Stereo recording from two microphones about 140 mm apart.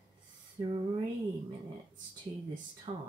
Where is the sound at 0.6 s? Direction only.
25° right (ahead or behind).